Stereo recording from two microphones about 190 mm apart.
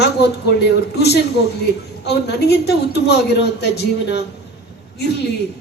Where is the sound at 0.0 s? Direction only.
60° left (ahead or behind).